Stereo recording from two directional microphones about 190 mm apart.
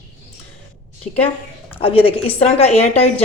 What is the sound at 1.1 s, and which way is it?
A woman's voice, 40° left (ahead or behind).